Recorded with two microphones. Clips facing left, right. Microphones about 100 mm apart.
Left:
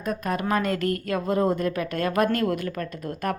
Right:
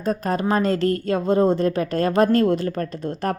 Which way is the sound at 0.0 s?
35° right (ahead or behind).